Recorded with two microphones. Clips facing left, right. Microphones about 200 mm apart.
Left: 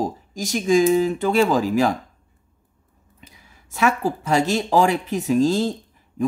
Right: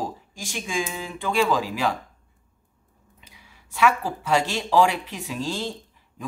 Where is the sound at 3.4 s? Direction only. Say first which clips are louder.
Even; 45° left (ahead or behind).